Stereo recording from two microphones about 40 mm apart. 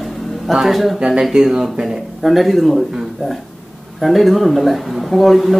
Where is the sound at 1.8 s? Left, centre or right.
Centre.